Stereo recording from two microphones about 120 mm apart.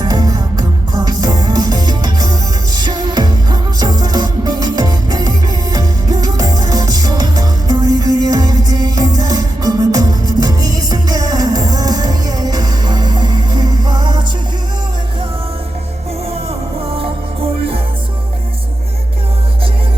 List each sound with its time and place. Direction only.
0.0 s music: 30° right (ahead or behind)
16.8 s music: 50° right (ahead or behind)